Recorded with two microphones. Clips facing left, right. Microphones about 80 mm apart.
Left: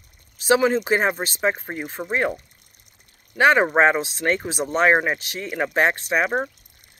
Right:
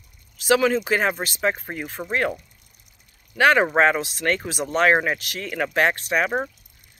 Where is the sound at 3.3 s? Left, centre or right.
Left.